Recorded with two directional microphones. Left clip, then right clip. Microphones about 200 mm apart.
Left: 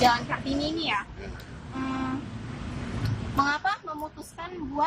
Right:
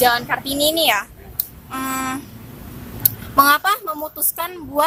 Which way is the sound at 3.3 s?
50° right (ahead or behind).